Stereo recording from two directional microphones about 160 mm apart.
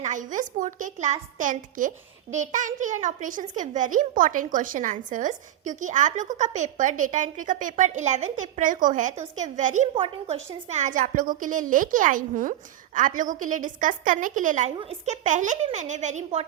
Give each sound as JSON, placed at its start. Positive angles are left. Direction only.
{"t": 0.0, "sound": "a child's voice", "side_deg": -50}
{"t": 9.9, "sound": "a woman's voice", "side_deg": -40}